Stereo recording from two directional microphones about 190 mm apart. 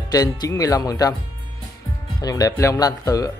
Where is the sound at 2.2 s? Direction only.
20° left (ahead or behind).